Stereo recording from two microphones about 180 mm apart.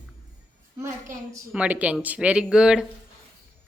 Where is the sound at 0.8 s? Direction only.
15° right (ahead or behind).